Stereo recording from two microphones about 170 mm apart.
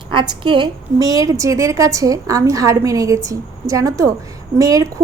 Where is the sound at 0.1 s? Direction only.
30° right (ahead or behind).